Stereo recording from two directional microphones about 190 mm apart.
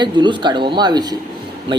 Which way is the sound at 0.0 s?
25° right (ahead or behind).